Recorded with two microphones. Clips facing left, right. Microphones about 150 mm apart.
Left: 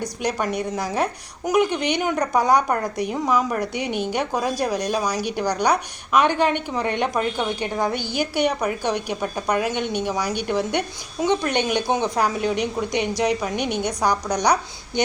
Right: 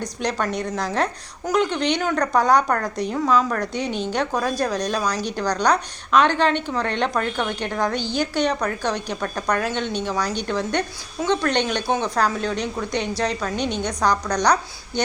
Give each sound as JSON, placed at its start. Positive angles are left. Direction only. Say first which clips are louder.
{"t": 0.0, "sound": "a woman's voice", "louder": "even", "side_deg": 10}